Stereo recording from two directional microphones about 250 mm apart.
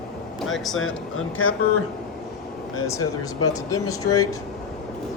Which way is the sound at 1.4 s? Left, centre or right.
Left.